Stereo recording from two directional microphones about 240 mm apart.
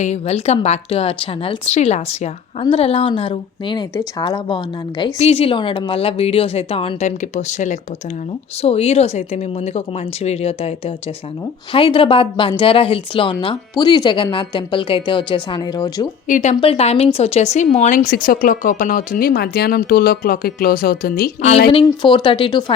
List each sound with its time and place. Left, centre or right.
0.0 s a woman's voice: left
16.2 s speech: left
21.7 s a woman's voice: left